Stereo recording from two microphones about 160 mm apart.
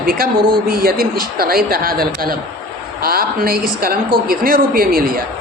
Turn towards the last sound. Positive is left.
turn(degrees=-65)  # may be behind; listen again after turning